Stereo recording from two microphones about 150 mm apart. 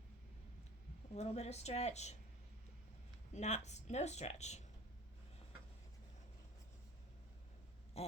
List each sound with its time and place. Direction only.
1.1 s speech: 45° left (ahead or behind)
3.3 s speech: 50° left (ahead or behind)
8.0 s a sound: 45° left (ahead or behind)